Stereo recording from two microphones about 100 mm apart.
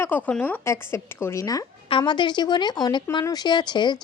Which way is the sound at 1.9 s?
50° left (ahead or behind).